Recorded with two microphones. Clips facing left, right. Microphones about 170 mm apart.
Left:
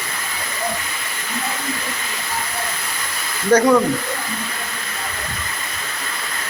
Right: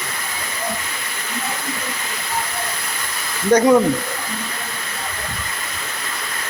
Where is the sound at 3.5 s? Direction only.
20° right (ahead or behind).